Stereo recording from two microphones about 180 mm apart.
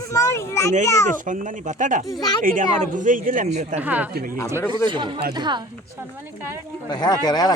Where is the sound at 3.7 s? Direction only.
10° right (ahead or behind).